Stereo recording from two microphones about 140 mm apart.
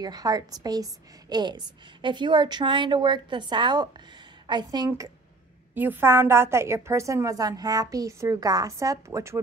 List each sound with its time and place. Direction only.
0.0 s a woman's voice: 30° right (ahead or behind)
5.8 s a woman's voice: 15° right (ahead or behind)